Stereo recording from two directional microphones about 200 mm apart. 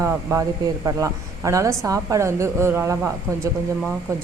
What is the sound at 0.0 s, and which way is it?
A woman's voice, 15° right (ahead or behind).